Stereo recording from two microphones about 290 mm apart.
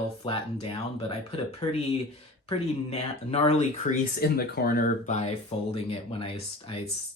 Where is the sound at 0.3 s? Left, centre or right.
Centre.